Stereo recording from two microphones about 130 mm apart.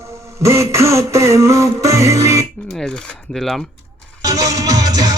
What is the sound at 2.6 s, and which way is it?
Speech, 5° left (ahead or behind).